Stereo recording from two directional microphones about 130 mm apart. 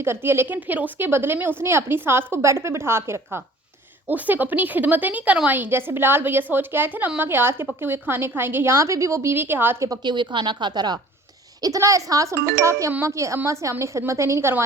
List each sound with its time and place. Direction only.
0.0 s a woman's voice: 20° right (ahead or behind)
9.9 s a woman's voice: 35° right (ahead or behind)